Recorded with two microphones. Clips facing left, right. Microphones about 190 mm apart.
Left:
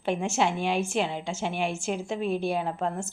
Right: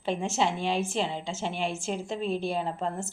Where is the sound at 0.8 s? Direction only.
Centre (ahead or behind).